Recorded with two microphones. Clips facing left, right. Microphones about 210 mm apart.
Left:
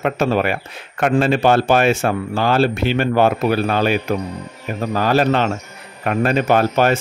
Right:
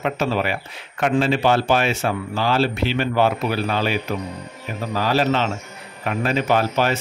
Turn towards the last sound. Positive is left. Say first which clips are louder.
# left 4 dB
turn(degrees=50)  # may be behind; listen again after turning